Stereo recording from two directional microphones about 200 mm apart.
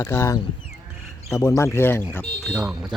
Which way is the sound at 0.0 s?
15° left (ahead or behind).